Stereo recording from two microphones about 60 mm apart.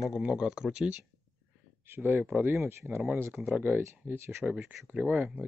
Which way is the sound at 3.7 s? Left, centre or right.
Right.